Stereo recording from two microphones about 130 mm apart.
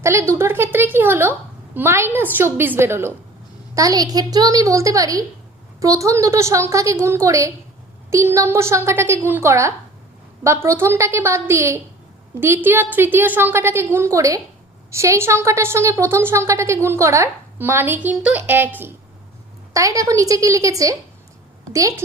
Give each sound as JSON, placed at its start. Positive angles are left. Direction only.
{"t": 0.0, "sound": "a woman's voice", "side_deg": -20}